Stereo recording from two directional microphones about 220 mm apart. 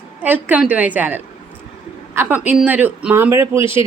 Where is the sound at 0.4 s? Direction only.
5° right (ahead or behind).